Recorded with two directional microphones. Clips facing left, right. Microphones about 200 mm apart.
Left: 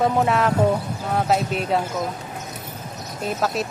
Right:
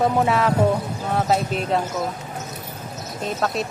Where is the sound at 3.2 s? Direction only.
Centre (ahead or behind).